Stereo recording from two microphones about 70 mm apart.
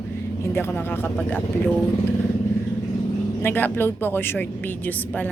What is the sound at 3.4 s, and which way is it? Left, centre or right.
A woman's voice, left.